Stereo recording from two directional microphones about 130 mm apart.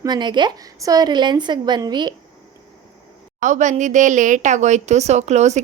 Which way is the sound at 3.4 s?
70° right (ahead or behind).